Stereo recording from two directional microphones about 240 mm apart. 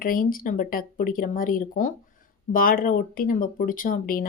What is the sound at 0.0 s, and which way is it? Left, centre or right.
Speech, left.